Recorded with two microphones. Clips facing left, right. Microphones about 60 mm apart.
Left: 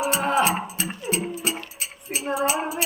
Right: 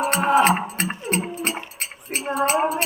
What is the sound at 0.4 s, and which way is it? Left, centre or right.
Speech, right.